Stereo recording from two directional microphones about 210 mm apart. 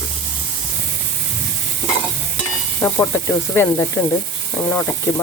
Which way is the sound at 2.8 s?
10° left (ahead or behind).